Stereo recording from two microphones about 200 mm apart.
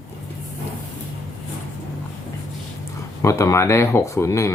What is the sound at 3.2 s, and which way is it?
Speech, 15° left (ahead or behind).